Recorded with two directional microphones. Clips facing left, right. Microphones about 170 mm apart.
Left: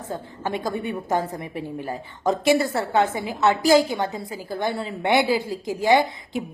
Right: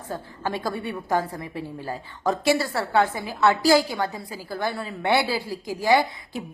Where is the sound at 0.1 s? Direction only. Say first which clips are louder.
Left 1 dB; 20° left (ahead or behind).